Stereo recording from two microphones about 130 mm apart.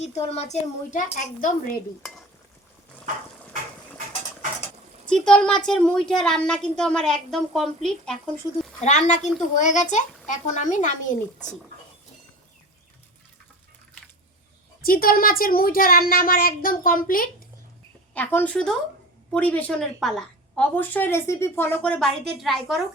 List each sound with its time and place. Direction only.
0.0 s a woman's voice: 60° left (ahead or behind); by 1.5 s 80° left
2.0 s a woman's voice: 5° left (ahead or behind)
5.0 s a woman's voice: 5° left (ahead or behind)
8.8 s a woman's voice: 65° left (ahead or behind)
14.8 s a woman's voice: 90° left
18.1 s a woman's voice: 15° left (ahead or behind)